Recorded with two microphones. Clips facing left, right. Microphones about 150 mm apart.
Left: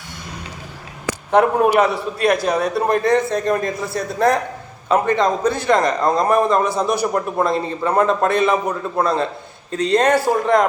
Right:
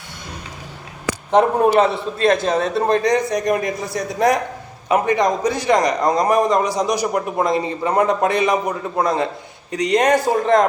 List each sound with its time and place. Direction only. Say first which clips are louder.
1.3 s a man's voice: even; 25° right (ahead or behind)